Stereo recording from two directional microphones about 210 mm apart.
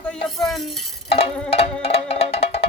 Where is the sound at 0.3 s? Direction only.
Centre (ahead or behind).